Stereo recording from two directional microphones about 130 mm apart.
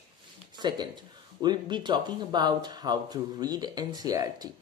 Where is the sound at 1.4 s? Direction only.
35° right (ahead or behind).